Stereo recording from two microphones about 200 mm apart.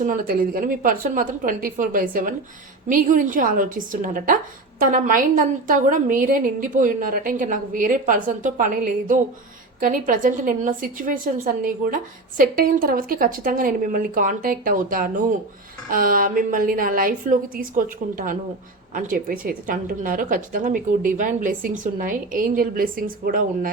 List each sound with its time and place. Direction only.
0.0 s a woman's voice: 45° right (ahead or behind)
18.9 s a woman's voice: 45° right (ahead or behind)